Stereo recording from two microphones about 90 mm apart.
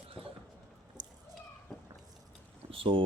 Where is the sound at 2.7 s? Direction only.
75° right (ahead or behind).